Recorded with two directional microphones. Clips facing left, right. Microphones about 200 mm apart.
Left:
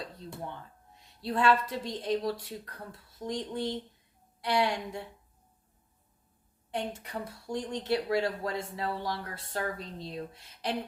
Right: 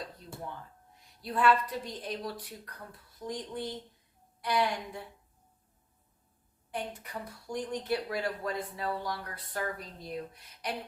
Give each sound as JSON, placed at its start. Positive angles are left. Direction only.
{"t": 1.2, "sound": "speech", "side_deg": 25}
{"t": 6.7, "sound": "speech", "side_deg": 25}